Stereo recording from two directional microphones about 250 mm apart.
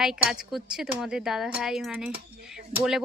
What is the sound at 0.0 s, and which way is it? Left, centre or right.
Speech, centre.